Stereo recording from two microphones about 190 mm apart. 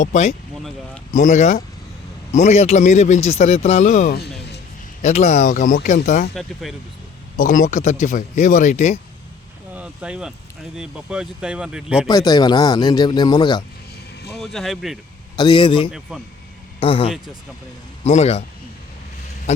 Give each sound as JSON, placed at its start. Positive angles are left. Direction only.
{"t": 0.0, "sound": "a man's voice", "side_deg": 40}
{"t": 4.1, "sound": "a sound", "side_deg": 60}
{"t": 5.0, "sound": "a man's voice", "side_deg": 40}
{"t": 6.3, "sound": "speech", "side_deg": 0}
{"t": 7.3, "sound": "a man's voice", "side_deg": 45}
{"t": 9.7, "sound": "a sound", "side_deg": -5}
{"t": 10.8, "sound": "speech", "side_deg": -5}
{"t": 12.0, "sound": "speech", "side_deg": 20}
{"t": 14.3, "sound": "speech", "side_deg": 0}
{"t": 15.4, "sound": "speech", "side_deg": 25}
{"t": 15.9, "sound": "speech", "side_deg": 0}
{"t": 16.8, "sound": "a man's voice", "side_deg": 30}
{"t": 19.5, "sound": "a sound", "side_deg": 35}